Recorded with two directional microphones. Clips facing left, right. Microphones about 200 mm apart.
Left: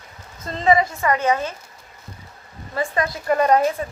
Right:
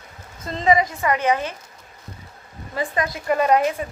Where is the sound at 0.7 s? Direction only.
15° right (ahead or behind).